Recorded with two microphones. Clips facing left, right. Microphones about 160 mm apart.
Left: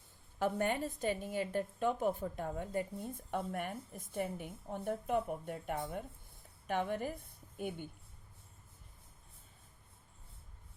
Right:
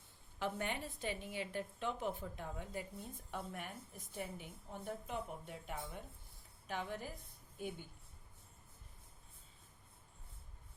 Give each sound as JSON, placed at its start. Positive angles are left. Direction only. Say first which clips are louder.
{"t": 0.3, "sound": "a woman's voice", "louder": "left 7 dB", "side_deg": 45}